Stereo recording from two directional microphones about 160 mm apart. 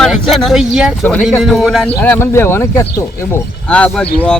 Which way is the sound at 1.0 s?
5° left (ahead or behind).